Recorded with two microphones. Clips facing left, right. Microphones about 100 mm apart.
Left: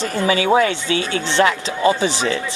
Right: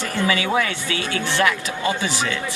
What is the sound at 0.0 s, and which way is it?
Speech, 25° left (ahead or behind).